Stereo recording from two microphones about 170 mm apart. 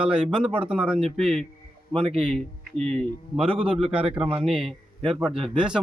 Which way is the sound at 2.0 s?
35° right (ahead or behind).